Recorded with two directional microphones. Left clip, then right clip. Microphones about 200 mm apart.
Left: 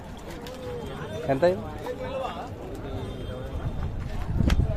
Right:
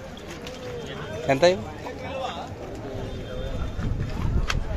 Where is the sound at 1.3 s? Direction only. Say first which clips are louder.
Right 3 dB; centre (ahead or behind).